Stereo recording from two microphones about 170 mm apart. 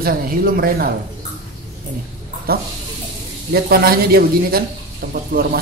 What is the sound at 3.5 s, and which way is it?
Speech, 60° right (ahead or behind).